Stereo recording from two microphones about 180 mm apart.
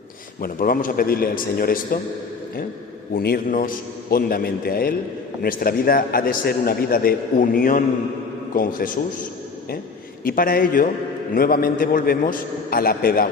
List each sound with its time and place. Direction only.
0.4 s a man's voice: 50° left (ahead or behind)
3.2 s a man's voice: 55° left (ahead or behind)
10.2 s a man's voice: 55° left (ahead or behind)